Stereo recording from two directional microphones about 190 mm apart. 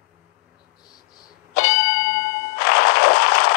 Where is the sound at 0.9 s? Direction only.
20° left (ahead or behind).